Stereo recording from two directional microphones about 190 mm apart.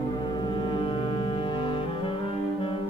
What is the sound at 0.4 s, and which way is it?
Music, 25° left (ahead or behind).